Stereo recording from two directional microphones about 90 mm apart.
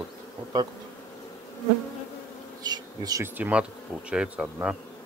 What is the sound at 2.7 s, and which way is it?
Bee, 45° right (ahead or behind).